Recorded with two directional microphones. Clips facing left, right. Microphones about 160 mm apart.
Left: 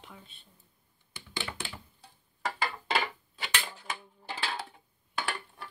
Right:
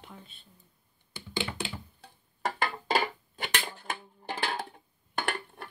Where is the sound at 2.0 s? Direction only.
55° right (ahead or behind).